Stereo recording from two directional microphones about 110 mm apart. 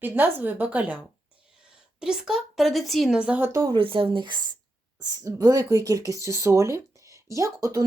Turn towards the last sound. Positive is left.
turn(degrees=-30)  # may be behind; listen again after turning